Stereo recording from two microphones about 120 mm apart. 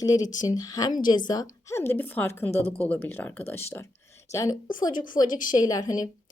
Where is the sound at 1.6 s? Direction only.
20° left (ahead or behind).